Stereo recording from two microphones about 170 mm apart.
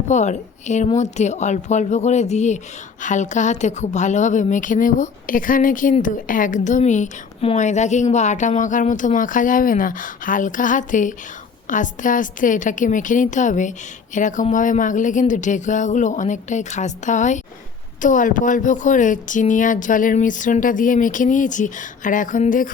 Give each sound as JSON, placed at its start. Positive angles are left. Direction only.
{"t": 0.1, "sound": "a woman's voice", "side_deg": 45}